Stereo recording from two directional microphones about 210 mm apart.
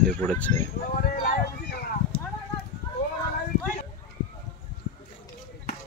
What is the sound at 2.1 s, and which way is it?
Clip-clop, 25° left (ahead or behind).